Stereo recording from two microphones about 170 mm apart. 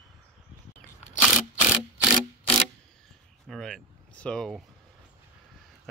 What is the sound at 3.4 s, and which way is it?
Speech, centre (ahead or behind).